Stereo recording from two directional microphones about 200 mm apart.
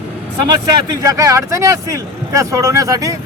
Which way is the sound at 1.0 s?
15° right (ahead or behind).